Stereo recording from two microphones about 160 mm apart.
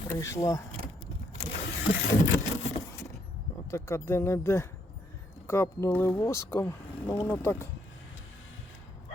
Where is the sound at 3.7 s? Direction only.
15° left (ahead or behind).